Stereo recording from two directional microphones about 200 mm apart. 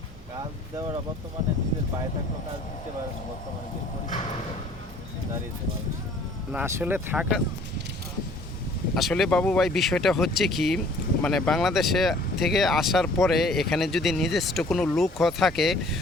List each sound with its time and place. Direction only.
0.8 s speech: 20° right (ahead or behind)
6.5 s speech: 10° right (ahead or behind)
9.0 s speech: centre (ahead or behind)